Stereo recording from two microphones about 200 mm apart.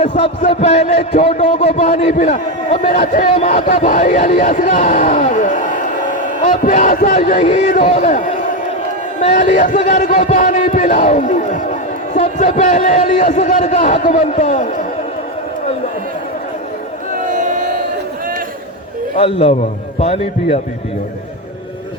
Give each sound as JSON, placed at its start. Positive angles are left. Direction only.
{"t": 0.6, "sound": "speech", "side_deg": 35}
{"t": 17.2, "sound": "crowd", "side_deg": -40}
{"t": 19.1, "sound": "a man's voice", "side_deg": 30}